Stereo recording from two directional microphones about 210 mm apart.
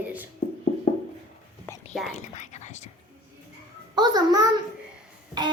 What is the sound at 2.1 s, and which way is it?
Speech, 35° left (ahead or behind).